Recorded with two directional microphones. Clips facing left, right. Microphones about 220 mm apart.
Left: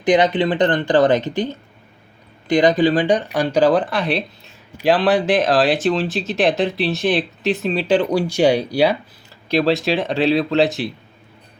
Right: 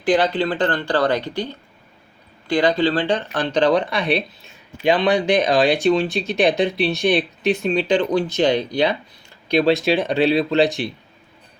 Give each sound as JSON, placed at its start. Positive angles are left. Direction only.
{"t": 0.0, "sound": "speech", "side_deg": 20}
{"t": 2.5, "sound": "speech", "side_deg": 20}